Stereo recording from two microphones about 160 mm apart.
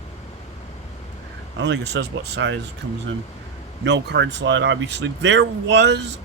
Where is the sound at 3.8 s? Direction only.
90° right.